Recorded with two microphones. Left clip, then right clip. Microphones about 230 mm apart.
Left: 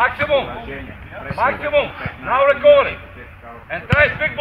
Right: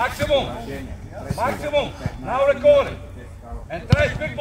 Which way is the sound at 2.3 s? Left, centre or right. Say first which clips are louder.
Left 4 dB; centre.